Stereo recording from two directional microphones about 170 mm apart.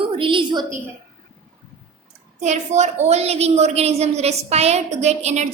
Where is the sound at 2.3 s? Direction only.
45° right (ahead or behind).